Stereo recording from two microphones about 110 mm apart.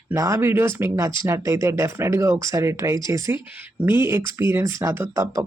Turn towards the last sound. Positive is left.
turn(degrees=-25)  # may be behind; listen again after turning